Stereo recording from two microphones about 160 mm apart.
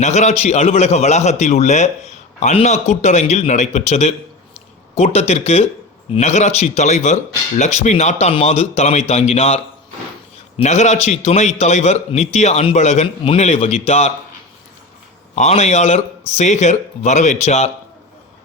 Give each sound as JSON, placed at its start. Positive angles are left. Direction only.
{"t": 0.0, "sound": "a man's voice", "side_deg": 45}
{"t": 10.6, "sound": "a man's voice", "side_deg": 45}
{"t": 15.4, "sound": "a man's voice", "side_deg": 45}